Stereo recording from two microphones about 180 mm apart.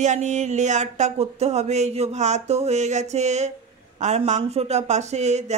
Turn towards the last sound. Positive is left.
turn(degrees=-40)  # may be behind; listen again after turning